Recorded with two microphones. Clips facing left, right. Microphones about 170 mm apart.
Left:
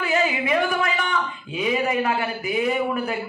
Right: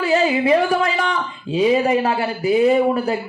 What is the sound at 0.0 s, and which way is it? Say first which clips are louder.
Speech: right 6 dB; 35° right (ahead or behind).